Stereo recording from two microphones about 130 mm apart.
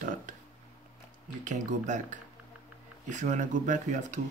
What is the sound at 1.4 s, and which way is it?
Speech, 70° right (ahead or behind).